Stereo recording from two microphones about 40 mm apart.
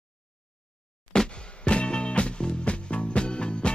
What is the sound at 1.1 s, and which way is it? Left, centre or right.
Music, left.